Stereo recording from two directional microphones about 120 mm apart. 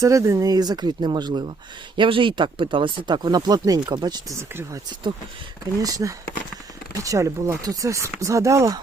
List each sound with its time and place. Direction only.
0.0 s speech: 25° right (ahead or behind)
5.8 s speech: 30° right (ahead or behind)